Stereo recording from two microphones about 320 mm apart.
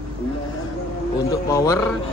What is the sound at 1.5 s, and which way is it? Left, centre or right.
Speech, centre.